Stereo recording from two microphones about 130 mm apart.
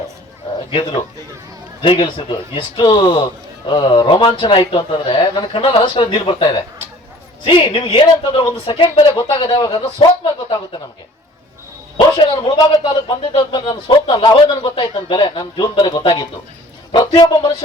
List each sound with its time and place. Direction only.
0.7 s a man's voice: 40° left (ahead or behind)
9.3 s a man's voice: 35° left (ahead or behind)
11.9 s a man's voice: 35° left (ahead or behind)